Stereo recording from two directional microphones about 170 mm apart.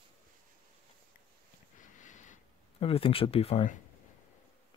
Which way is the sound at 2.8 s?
35° left (ahead or behind).